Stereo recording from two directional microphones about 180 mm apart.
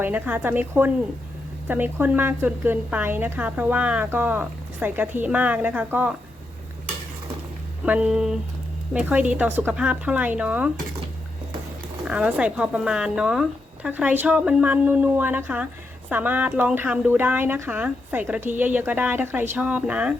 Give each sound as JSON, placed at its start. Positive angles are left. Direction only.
{"t": 0.0, "sound": "a woman's voice", "side_deg": -10}
{"t": 7.9, "sound": "a woman's voice", "side_deg": -5}
{"t": 12.0, "sound": "a woman's voice", "side_deg": -5}